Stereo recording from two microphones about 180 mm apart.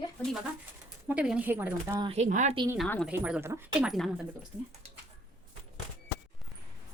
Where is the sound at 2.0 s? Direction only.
30° right (ahead or behind).